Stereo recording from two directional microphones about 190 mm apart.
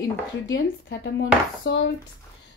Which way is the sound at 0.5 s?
70° left (ahead or behind).